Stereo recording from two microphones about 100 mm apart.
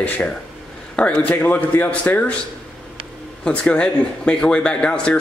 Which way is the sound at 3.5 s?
10° left (ahead or behind).